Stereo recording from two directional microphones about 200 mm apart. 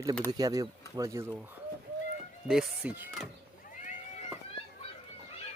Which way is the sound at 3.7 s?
40° left (ahead or behind).